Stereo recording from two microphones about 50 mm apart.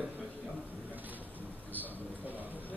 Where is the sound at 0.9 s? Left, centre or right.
Right.